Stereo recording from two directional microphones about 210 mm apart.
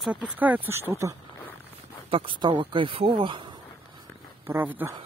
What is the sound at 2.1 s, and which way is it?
Speech, 25° right (ahead or behind).